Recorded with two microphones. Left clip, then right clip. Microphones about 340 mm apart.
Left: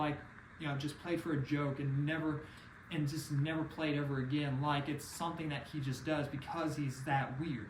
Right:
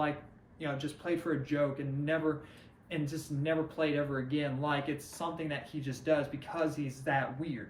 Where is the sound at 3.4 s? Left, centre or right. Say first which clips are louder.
Right 7 dB; centre.